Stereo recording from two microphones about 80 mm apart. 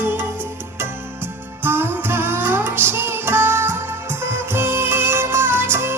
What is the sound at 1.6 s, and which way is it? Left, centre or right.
Music, right.